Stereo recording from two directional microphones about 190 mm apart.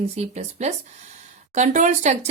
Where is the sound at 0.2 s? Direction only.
35° right (ahead or behind).